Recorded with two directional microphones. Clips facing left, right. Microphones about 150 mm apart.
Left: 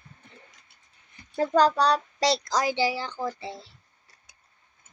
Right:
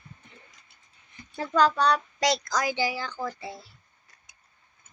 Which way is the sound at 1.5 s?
40° left (ahead or behind).